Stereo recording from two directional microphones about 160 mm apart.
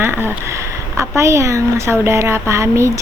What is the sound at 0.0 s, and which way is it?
A woman's voice, 15° right (ahead or behind).